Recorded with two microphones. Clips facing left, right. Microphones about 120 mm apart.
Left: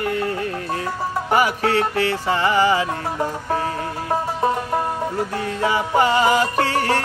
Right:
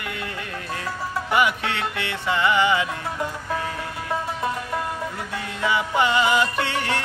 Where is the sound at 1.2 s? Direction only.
40° left (ahead or behind).